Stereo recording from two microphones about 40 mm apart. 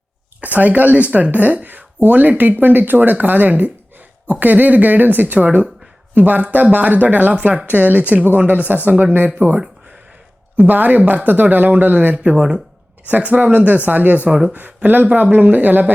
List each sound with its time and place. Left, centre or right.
0.4 s speech: right
10.6 s speech: right